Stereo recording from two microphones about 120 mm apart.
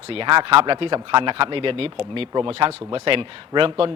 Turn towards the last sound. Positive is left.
turn(degrees=-45)  # may be behind; listen again after turning